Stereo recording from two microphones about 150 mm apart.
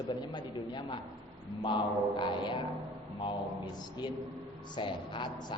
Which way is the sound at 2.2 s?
30° left (ahead or behind).